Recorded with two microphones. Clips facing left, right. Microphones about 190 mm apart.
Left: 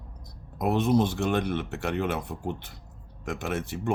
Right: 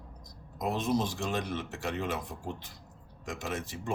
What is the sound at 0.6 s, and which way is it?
Speech, 65° left (ahead or behind).